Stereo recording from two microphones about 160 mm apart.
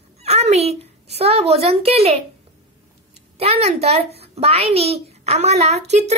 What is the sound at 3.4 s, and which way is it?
A woman's voice, 40° right (ahead or behind).